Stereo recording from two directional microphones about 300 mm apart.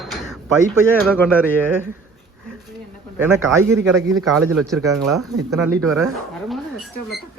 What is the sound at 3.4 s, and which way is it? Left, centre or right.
Speech, right.